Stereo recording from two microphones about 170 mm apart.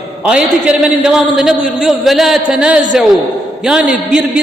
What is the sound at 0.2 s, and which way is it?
A man's voice, 5° right (ahead or behind).